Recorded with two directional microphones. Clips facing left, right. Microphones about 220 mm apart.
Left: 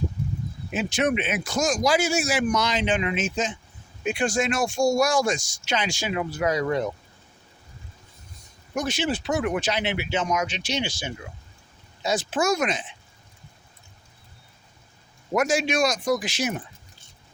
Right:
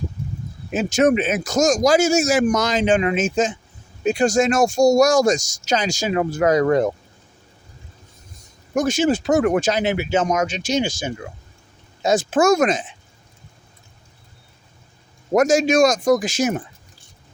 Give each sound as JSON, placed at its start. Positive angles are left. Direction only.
{"t": 0.7, "sound": "speech", "side_deg": -45}
{"t": 8.7, "sound": "speech", "side_deg": -45}
{"t": 15.3, "sound": "speech", "side_deg": -45}